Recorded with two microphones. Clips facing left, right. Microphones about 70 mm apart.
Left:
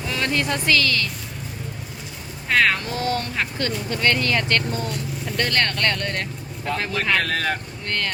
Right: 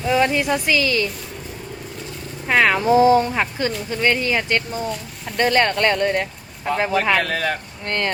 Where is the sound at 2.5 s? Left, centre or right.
Centre.